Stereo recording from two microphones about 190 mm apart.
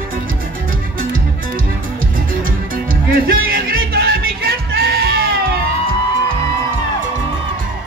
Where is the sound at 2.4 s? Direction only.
50° right (ahead or behind).